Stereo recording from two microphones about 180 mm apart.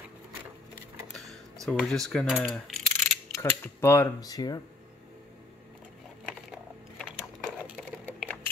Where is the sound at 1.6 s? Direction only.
Centre (ahead or behind).